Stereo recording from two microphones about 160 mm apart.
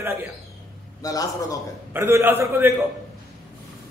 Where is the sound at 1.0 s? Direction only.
20° left (ahead or behind).